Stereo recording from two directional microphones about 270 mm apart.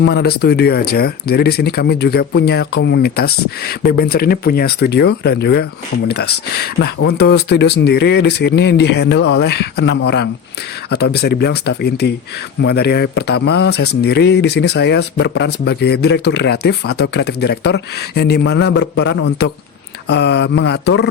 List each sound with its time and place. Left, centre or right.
0.0 s speech: left